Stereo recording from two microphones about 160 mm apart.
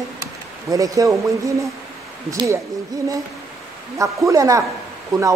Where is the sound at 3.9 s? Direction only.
20° right (ahead or behind).